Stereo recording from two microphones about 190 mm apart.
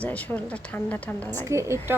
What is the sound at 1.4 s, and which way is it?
Speech, 15° right (ahead or behind).